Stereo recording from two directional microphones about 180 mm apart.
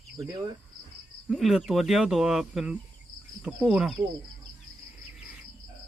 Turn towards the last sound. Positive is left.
turn(degrees=-5)  # may be behind; listen again after turning